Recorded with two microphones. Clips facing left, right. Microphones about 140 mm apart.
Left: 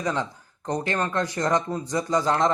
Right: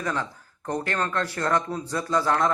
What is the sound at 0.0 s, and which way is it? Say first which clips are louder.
Speech: left 2 dB; 20° left (ahead or behind).